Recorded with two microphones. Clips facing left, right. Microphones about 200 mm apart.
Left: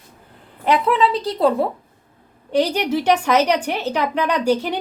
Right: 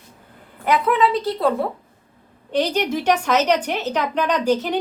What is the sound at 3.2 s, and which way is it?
Speech, 10° left (ahead or behind).